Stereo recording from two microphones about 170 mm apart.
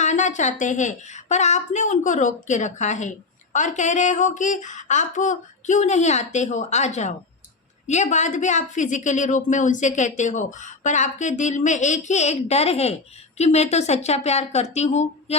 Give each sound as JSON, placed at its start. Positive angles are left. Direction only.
{"t": 0.0, "sound": "a woman's voice", "side_deg": 45}